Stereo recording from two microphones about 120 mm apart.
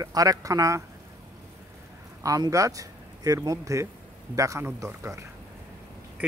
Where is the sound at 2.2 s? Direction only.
30° right (ahead or behind).